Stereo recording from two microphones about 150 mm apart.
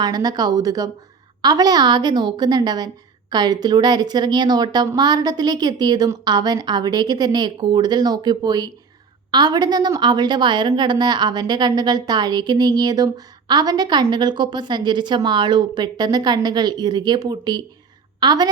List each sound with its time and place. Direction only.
0.0 s a woman's voice: 25° right (ahead or behind)